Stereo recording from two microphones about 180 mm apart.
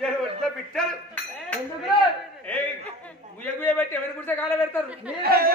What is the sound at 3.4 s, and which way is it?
A man's voice, 10° left (ahead or behind).